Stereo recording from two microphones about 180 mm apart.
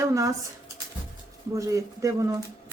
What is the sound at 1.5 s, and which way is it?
Speech, 20° right (ahead or behind).